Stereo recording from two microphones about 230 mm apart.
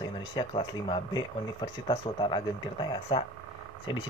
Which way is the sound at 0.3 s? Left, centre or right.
Left.